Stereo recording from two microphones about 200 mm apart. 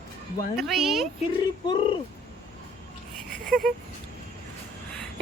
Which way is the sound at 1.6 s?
25° left (ahead or behind).